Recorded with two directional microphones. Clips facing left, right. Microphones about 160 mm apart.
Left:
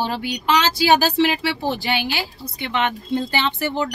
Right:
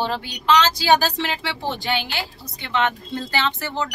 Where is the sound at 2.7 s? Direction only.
15° left (ahead or behind).